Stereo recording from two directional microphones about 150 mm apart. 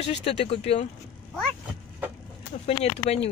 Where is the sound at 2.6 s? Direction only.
45° left (ahead or behind).